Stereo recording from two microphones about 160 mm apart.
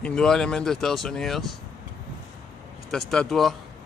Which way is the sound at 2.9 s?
5° left (ahead or behind).